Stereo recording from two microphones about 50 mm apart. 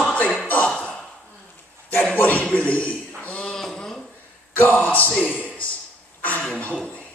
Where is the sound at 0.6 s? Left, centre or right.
Centre.